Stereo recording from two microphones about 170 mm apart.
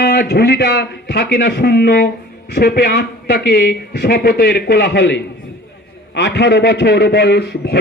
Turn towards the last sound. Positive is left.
turn(degrees=75)  # may be behind; listen again after turning